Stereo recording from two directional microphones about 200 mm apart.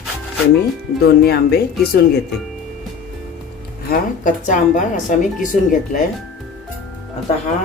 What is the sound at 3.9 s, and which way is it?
A woman's voice, 40° left (ahead or behind).